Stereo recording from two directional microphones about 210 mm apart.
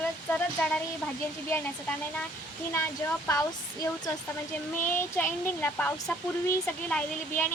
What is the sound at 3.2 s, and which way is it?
Speech, 15° left (ahead or behind).